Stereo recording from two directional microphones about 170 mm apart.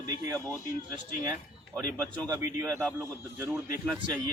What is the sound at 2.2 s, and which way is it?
A man's voice, 20° right (ahead or behind).